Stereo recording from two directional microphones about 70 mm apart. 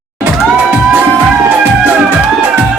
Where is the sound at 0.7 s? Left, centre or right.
Right.